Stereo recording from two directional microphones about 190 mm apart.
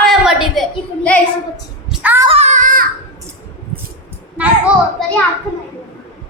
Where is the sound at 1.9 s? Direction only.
10° right (ahead or behind).